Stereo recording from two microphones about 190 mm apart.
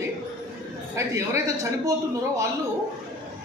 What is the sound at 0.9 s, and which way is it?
Speech, 15° right (ahead or behind).